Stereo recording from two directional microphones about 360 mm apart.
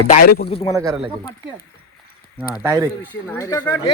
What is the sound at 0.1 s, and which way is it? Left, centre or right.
Speech, left.